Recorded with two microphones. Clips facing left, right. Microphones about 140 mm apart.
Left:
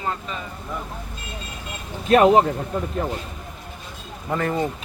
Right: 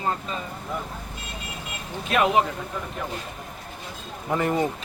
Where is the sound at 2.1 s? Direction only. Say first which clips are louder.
Left 7 dB; 40° left (ahead or behind).